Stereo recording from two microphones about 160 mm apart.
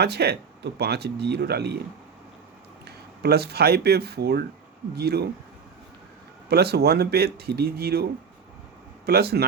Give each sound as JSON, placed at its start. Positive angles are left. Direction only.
{"t": 0.0, "sound": "speech", "side_deg": -90}
{"t": 2.8, "sound": "speech", "side_deg": -90}
{"t": 6.5, "sound": "speech", "side_deg": -85}
{"t": 9.0, "sound": "speech", "side_deg": -85}